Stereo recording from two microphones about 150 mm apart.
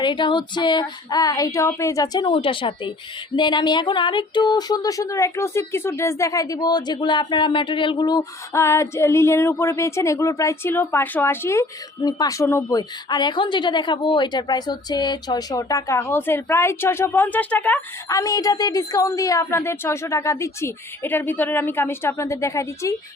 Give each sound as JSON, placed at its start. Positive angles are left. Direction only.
{"t": 0.0, "sound": "female singing", "side_deg": 30}
{"t": 3.3, "sound": "speech", "side_deg": 30}
{"t": 18.1, "sound": "speech", "side_deg": 20}